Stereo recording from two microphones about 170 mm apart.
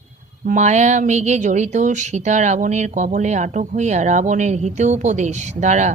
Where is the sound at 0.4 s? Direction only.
45° right (ahead or behind).